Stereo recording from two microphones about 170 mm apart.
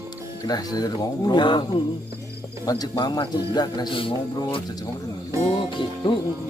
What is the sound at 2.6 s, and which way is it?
A man's voice, 20° left (ahead or behind).